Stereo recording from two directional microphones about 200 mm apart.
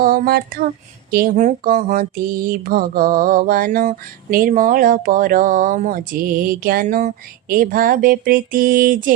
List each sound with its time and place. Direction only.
0.0 s speech: 50° right (ahead or behind)